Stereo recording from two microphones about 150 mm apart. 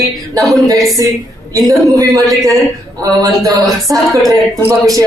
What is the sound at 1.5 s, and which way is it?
A woman's voice, 25° right (ahead or behind).